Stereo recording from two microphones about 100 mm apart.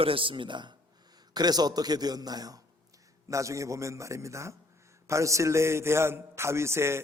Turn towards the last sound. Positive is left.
turn(degrees=-25)  # may be behind; listen again after turning